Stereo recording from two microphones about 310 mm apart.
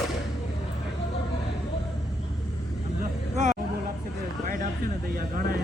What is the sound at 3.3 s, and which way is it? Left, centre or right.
Hubbub, right.